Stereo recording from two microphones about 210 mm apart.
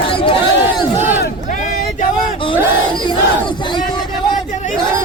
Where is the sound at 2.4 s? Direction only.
25° left (ahead or behind).